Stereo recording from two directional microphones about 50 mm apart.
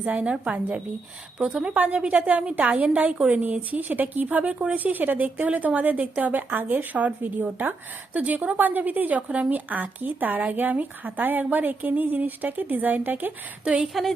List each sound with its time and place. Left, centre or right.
0.0 s a woman's voice: right
13.8 s speech: centre